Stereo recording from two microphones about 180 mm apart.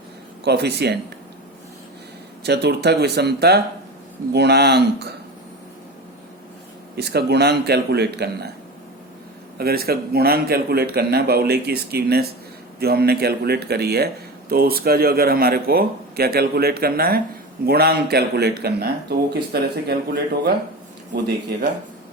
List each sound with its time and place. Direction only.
0.4 s speech: 65° right (ahead or behind)
2.4 s a man's voice: 65° right (ahead or behind)
6.9 s a man's voice: 65° right (ahead or behind)
9.6 s a man's voice: 60° right (ahead or behind)